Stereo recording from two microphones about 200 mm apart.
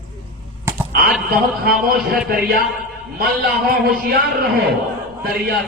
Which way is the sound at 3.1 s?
50° right (ahead or behind).